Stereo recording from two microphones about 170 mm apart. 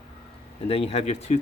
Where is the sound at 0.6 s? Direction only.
35° left (ahead or behind).